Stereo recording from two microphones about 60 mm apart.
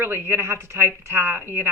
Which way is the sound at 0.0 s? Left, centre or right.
Right.